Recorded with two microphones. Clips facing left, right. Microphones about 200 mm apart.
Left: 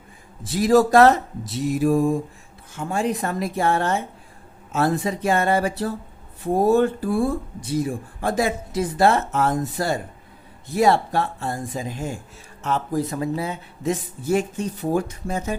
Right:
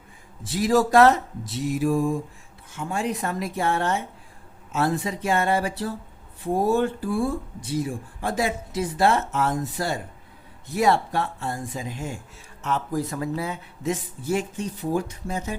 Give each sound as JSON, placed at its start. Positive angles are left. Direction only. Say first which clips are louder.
{"t": 0.4, "sound": "speech", "louder": "left 4 dB", "side_deg": 40}
{"t": 13.8, "sound": "speech", "louder": "left 3 dB", "side_deg": 40}